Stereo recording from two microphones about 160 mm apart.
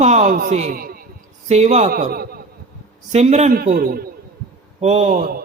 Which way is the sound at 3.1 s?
45° right (ahead or behind).